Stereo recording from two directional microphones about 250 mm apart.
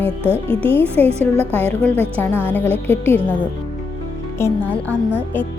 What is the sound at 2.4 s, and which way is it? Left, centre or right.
Speech, centre.